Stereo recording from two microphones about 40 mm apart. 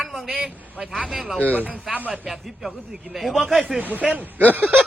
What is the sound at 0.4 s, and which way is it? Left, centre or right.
Speech, centre.